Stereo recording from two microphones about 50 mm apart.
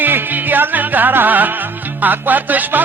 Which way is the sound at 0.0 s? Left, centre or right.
Right.